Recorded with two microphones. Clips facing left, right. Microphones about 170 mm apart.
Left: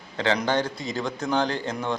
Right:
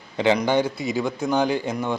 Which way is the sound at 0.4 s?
10° right (ahead or behind).